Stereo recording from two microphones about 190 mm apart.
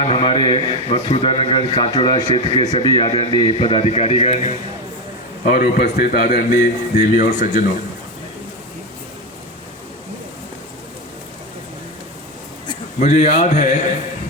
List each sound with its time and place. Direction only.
0.0 s a man's voice: 25° left (ahead or behind)
5.5 s a man's voice: 50° left (ahead or behind)
13.0 s speech: 40° left (ahead or behind)